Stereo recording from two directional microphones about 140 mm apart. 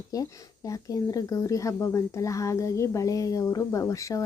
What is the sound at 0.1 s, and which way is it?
Speech, 25° left (ahead or behind).